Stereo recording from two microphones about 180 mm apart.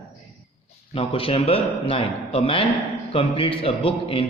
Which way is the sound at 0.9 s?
30° left (ahead or behind).